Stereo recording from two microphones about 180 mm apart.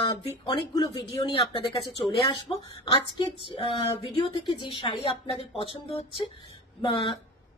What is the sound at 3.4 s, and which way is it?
Speech, 30° left (ahead or behind).